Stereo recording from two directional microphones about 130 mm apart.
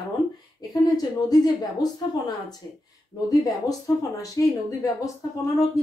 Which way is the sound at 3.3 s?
25° left (ahead or behind).